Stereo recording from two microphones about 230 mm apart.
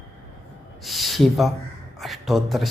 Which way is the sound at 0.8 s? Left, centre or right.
Centre.